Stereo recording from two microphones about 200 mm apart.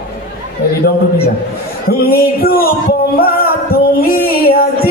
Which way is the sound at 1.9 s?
50° left (ahead or behind).